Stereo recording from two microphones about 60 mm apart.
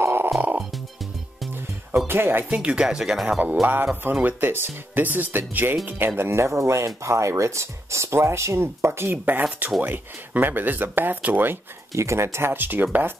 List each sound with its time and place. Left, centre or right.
0.0 s music: right
2.0 s speech: right
2.5 s speech: centre
3.6 s speech: right
11.9 s speech: right